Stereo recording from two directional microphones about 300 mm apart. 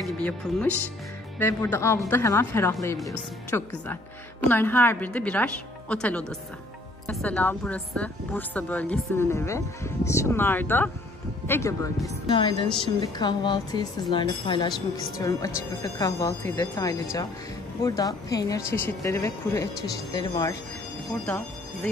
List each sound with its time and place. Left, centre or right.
0.0 s a woman's voice: centre